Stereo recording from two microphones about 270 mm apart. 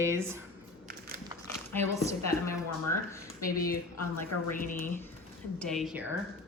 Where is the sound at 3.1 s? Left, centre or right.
Centre.